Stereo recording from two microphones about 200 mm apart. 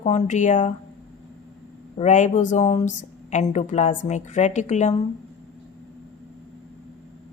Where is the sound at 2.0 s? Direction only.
35° left (ahead or behind).